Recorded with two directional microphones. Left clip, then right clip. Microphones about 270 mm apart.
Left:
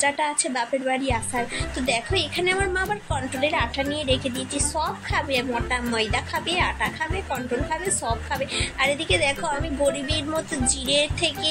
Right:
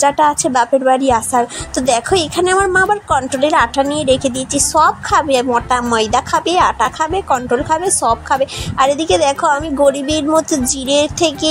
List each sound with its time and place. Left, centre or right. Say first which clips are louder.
0.0 s a woman's voice: right 11 dB; right